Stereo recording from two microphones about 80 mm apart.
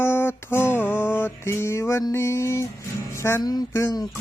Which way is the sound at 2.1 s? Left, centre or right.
Left.